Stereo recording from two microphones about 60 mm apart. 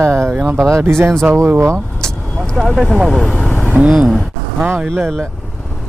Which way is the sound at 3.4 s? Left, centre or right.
Left.